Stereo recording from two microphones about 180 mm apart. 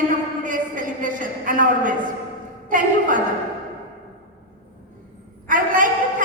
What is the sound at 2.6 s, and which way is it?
Speech, 50° right (ahead or behind).